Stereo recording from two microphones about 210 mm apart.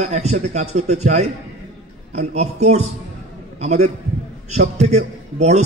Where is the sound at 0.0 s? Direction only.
35° right (ahead or behind).